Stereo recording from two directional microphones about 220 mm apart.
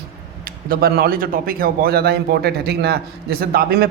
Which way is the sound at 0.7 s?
45° right (ahead or behind).